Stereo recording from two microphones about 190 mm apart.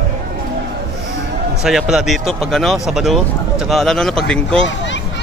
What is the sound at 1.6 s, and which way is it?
Speech, centre (ahead or behind).